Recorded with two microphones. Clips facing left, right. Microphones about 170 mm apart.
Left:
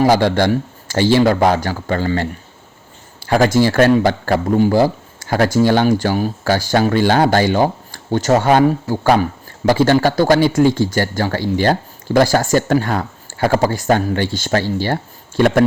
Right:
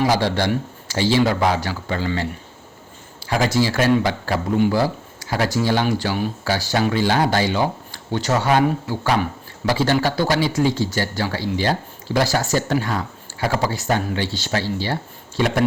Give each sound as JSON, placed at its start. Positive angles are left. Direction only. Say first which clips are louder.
{"t": 0.0, "sound": "speech", "louder": "left 6 dB", "side_deg": 55}
{"t": 3.2, "sound": "speech", "louder": "left 6 dB", "side_deg": 50}